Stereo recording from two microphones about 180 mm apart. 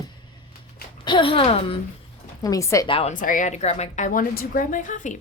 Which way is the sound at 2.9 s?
35° left (ahead or behind).